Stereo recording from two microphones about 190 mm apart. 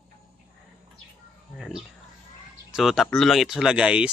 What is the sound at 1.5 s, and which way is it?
Speech, centre (ahead or behind).